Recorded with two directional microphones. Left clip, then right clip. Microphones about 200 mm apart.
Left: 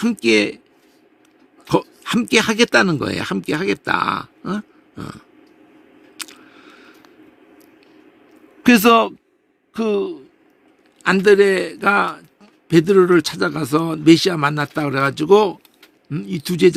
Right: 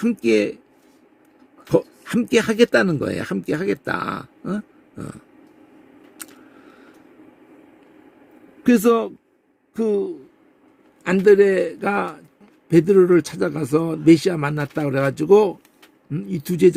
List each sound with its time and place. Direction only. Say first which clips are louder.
0.0 s a man's voice: left 2 dB; 10° left (ahead or behind)
1.7 s a man's voice: left 1 dB; 10° left (ahead or behind)
6.1 s a sound: left 8 dB; 10° left (ahead or behind)
8.6 s a man's voice: left 5 dB; 15° left (ahead or behind)